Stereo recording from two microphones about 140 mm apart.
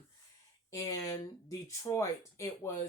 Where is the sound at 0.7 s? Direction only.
25° left (ahead or behind).